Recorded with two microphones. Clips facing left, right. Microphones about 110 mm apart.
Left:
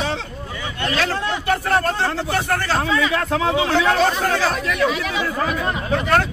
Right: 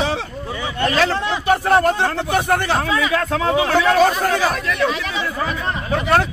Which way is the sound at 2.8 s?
5° right (ahead or behind).